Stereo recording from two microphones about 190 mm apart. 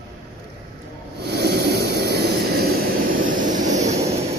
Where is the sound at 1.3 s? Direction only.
60° right (ahead or behind); by 4.2 s 40° right (ahead or behind).